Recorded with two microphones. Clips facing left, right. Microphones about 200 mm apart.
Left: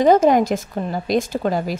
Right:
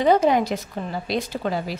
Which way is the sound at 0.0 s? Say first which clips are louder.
Left 4 dB; 45° left (ahead or behind).